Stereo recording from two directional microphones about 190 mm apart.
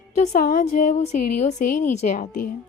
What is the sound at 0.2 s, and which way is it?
A woman's voice, 45° left (ahead or behind).